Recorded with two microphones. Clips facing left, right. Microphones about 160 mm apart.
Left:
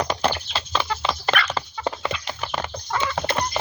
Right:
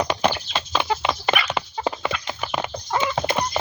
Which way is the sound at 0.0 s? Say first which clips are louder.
Right 2 dB; 10° right (ahead or behind).